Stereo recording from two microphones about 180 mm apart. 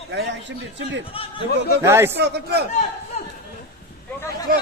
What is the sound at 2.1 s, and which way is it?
Speech, 65° right (ahead or behind).